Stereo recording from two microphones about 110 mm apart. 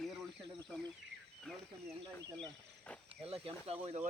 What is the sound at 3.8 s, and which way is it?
Speech, 85° right.